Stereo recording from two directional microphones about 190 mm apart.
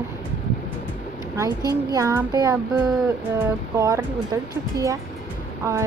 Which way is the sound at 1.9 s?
20° right (ahead or behind).